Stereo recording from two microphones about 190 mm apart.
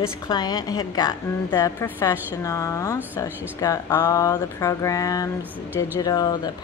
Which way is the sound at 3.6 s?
15° left (ahead or behind).